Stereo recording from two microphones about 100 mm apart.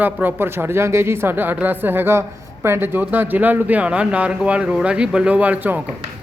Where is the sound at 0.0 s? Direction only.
20° right (ahead or behind).